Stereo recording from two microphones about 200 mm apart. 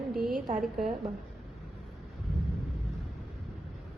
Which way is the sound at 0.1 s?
Centre (ahead or behind).